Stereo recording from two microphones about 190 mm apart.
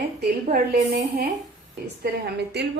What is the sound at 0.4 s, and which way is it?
Speech, 45° right (ahead or behind).